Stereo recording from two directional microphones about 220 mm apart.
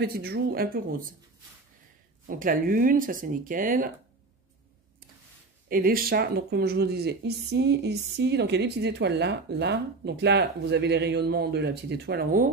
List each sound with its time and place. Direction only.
0.0 s speech: 45° right (ahead or behind)
2.2 s speech: 40° right (ahead or behind)
5.7 s speech: 40° right (ahead or behind)